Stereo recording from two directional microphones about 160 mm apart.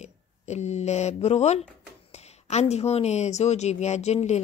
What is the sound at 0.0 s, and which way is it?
Speech, 45° left (ahead or behind).